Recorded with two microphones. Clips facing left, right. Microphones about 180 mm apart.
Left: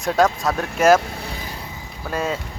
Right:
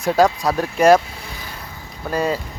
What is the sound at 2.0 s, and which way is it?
Speech, centre (ahead or behind).